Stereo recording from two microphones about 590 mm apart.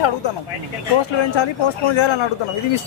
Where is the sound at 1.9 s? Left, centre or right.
Left.